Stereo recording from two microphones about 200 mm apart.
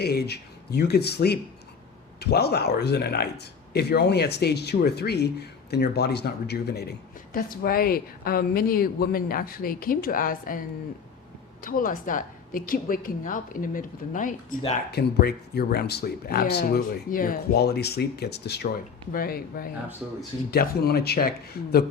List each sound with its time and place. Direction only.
0.0 s speech: 55° left (ahead or behind)
11.6 s speech: 45° left (ahead or behind)
14.8 s speech: 55° left (ahead or behind)